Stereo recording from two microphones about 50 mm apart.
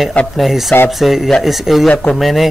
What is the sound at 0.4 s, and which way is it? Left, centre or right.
Speech, centre.